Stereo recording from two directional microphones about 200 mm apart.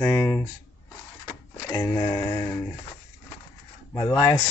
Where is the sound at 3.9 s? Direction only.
20° left (ahead or behind).